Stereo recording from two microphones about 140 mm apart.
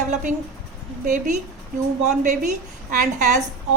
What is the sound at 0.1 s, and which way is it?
A woman's voice, 60° right (ahead or behind).